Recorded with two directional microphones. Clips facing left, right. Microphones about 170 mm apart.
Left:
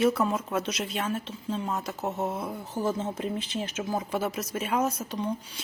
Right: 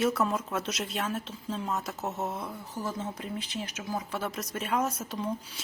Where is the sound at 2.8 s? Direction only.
25° left (ahead or behind).